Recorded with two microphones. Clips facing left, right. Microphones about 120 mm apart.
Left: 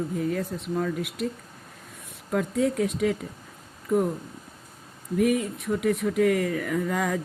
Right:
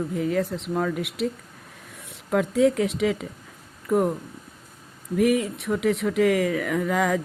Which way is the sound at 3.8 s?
70° right (ahead or behind).